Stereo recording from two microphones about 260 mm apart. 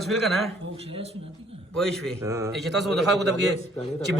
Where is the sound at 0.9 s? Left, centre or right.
Right.